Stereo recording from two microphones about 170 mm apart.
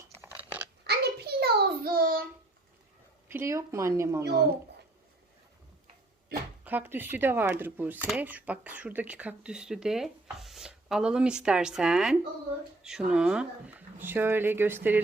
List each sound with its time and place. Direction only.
0.0 s crunch: 15° right (ahead or behind)
0.9 s child singing: 70° right (ahead or behind)
3.2 s speech: 15° right (ahead or behind)
4.2 s speech: 70° right (ahead or behind)
6.7 s speech: 10° right (ahead or behind)